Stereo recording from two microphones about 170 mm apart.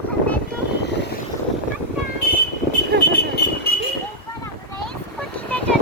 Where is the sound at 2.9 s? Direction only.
75° right (ahead or behind).